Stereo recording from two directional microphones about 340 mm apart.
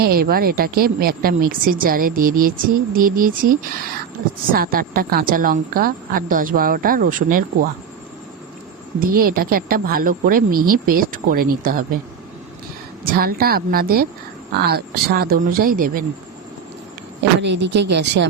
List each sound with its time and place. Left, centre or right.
0.0 s a woman's voice: right
9.0 s a woman's voice: right
13.1 s a woman's voice: right
17.4 s a woman's voice: right